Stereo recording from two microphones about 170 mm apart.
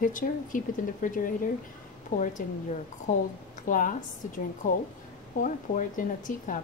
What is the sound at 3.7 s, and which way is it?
Speech, 50° left (ahead or behind).